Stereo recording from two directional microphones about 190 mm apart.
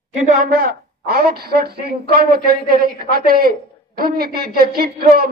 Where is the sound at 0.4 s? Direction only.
50° right (ahead or behind).